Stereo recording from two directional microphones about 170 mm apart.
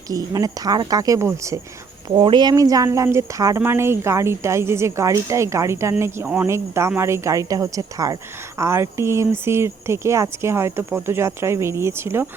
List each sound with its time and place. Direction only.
0.1 s speech: 20° right (ahead or behind)